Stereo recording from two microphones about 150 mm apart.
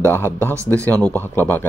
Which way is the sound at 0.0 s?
15° left (ahead or behind).